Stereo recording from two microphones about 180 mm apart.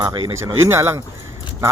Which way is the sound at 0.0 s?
25° right (ahead or behind).